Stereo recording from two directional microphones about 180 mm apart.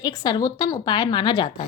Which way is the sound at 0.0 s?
20° left (ahead or behind).